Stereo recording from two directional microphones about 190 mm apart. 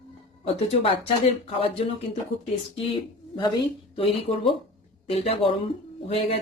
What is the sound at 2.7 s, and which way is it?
Speech, 25° left (ahead or behind).